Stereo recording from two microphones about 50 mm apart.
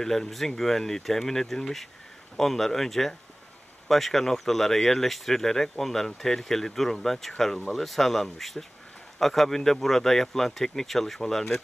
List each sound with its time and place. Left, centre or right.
0.0 s speech: centre